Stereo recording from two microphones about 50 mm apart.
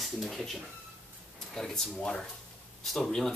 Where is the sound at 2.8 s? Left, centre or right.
Centre.